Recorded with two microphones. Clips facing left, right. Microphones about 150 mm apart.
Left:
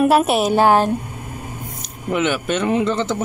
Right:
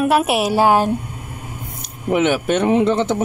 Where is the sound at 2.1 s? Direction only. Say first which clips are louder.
Right 3 dB; 55° right (ahead or behind).